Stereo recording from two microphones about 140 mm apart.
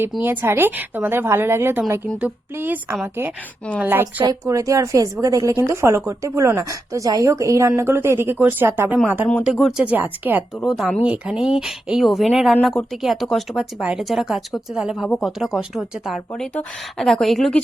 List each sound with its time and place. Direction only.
0.2 s a woman's voice: 15° right (ahead or behind)
4.2 s a woman's voice: 25° right (ahead or behind)
9.4 s speech: 5° right (ahead or behind)
9.9 s a woman's voice: 15° right (ahead or behind)
10.6 s speech: centre (ahead or behind)